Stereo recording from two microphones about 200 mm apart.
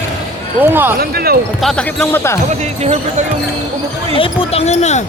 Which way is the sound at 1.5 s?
5° left (ahead or behind).